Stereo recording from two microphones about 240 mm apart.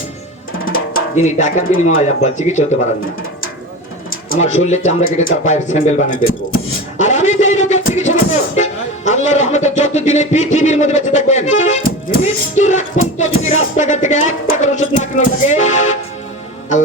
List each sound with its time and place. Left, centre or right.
0.6 s drum: left
2.0 s music: left
4.1 s music: left
7.0 s a sound: left
8.5 s speech: left
13.1 s music: left